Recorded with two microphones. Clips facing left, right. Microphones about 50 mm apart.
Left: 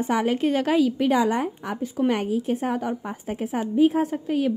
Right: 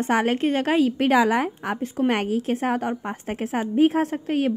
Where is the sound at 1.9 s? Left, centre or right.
Right.